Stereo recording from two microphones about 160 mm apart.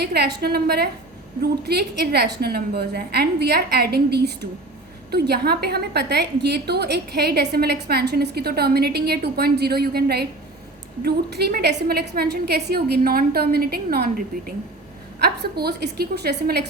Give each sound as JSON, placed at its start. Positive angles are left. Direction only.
{"t": 0.0, "sound": "a woman's voice", "side_deg": -90}
{"t": 11.0, "sound": "a woman's voice", "side_deg": -90}